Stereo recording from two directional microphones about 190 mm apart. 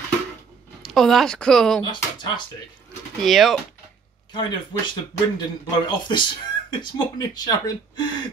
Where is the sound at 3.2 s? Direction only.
Centre (ahead or behind).